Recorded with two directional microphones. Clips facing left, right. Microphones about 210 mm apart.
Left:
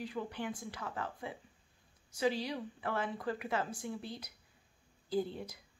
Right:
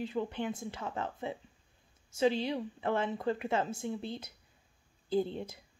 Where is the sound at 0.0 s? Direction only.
25° right (ahead or behind).